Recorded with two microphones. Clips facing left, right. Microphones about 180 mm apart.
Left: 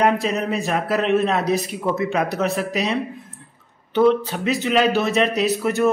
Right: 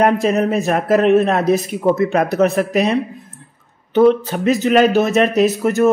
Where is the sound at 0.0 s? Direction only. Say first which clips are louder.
Right 5 dB; 50° right (ahead or behind).